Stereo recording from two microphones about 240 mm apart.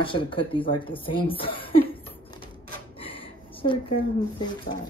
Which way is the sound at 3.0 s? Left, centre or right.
Left.